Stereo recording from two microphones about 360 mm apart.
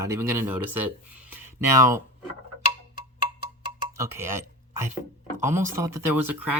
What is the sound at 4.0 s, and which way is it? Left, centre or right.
Speech, centre.